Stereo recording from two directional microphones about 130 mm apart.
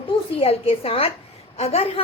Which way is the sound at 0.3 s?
45° left (ahead or behind).